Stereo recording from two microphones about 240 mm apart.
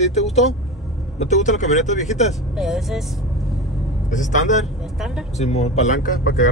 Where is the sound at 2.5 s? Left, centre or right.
Centre.